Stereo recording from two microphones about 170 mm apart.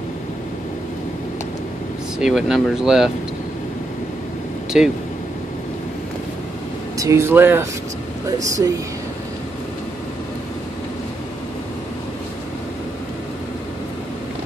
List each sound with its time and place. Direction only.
2.1 s speech: 5° right (ahead or behind)
4.7 s speech: 5° right (ahead or behind)
7.0 s speech: 15° right (ahead or behind)